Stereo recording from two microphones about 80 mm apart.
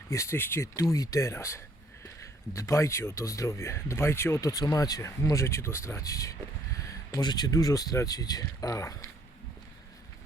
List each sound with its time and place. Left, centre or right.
0.1 s speech: left
7.1 s speech: left